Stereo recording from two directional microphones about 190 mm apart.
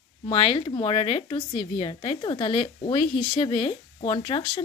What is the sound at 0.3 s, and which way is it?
Speech, 30° left (ahead or behind).